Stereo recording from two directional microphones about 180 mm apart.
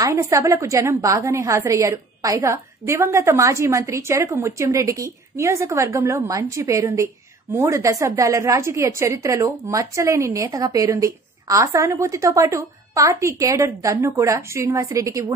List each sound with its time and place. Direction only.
0.0 s a woman's voice: 15° right (ahead or behind)